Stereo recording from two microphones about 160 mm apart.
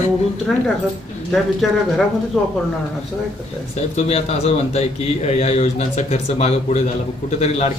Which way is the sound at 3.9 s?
40° left (ahead or behind).